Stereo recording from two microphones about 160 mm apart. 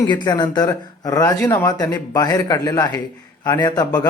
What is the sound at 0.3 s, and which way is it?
Speech, 25° left (ahead or behind).